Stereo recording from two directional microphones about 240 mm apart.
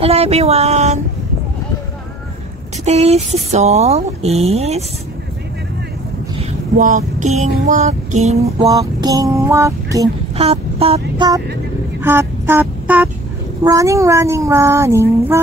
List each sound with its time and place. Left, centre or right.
0.0 s a sound: right
2.8 s speech: right
6.8 s speech: right
8.6 s speech: centre
10.3 s speech: right